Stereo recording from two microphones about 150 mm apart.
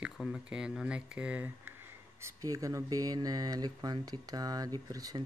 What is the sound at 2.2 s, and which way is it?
Speech, 20° right (ahead or behind).